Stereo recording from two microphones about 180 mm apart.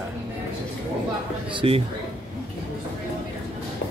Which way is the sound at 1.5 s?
30° right (ahead or behind).